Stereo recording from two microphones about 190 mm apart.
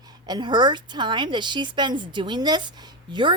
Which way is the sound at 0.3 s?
20° right (ahead or behind).